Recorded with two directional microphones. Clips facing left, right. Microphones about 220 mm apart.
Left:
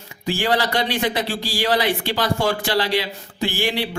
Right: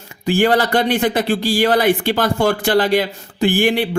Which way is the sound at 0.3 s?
55° right (ahead or behind).